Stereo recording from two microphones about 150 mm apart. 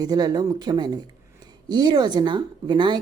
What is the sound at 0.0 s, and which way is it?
A woman's voice, 25° right (ahead or behind).